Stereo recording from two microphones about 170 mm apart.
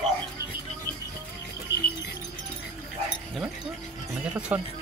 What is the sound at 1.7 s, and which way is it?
Music, 90° left.